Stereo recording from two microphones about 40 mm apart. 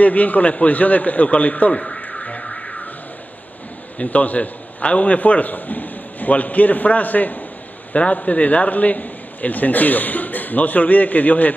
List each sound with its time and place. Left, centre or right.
0.0 s a man's voice: left
1.7 s a man's voice: left
2.4 s music: left
4.0 s a man's voice: left